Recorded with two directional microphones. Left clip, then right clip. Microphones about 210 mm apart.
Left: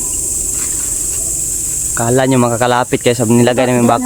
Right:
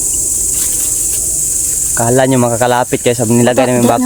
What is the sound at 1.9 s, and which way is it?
Cricket, centre (ahead or behind).